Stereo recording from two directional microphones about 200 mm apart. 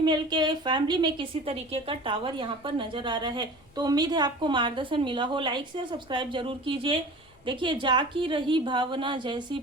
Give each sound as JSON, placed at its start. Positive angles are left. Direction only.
{"t": 0.0, "sound": "a woman's voice", "side_deg": -20}